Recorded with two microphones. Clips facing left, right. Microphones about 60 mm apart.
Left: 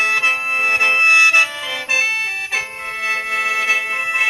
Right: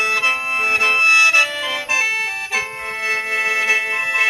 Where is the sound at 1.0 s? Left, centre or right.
Left.